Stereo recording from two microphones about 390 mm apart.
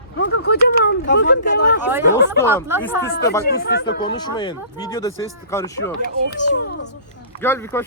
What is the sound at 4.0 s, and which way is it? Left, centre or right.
Speech, centre.